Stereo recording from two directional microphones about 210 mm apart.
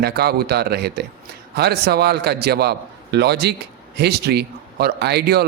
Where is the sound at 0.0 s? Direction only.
50° right (ahead or behind).